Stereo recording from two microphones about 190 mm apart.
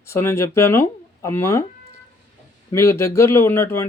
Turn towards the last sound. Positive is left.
turn(degrees=15)  # may be behind; listen again after turning